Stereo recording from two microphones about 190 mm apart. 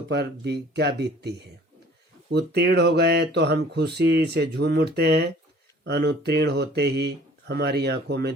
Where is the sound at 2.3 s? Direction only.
60° right (ahead or behind).